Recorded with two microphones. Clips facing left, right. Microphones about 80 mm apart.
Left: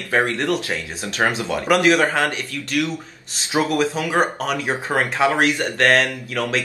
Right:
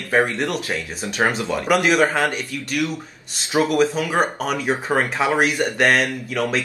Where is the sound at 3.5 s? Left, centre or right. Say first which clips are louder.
Right 2 dB; centre.